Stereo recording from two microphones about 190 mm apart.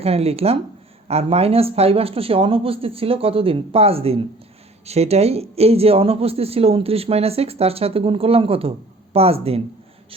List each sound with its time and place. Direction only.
0.0 s speech: 30° right (ahead or behind)